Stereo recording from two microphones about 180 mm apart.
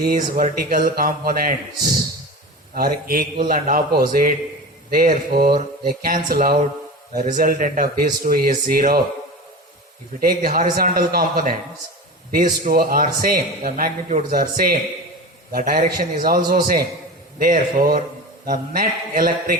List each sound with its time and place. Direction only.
0.0 s a man's voice: 55° right (ahead or behind)
2.7 s a man's voice: 55° right (ahead or behind)
10.2 s a man's voice: 55° right (ahead or behind)